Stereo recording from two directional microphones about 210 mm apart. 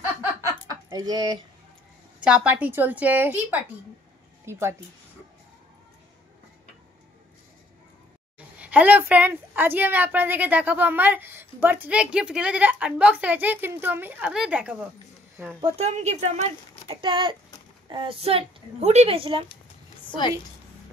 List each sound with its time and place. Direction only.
0.7 s a sound: 15° right (ahead or behind)
2.2 s a woman's voice: 5° right (ahead or behind)
8.4 s a woman's voice: 5° right (ahead or behind)
15.6 s speech: 30° right (ahead or behind)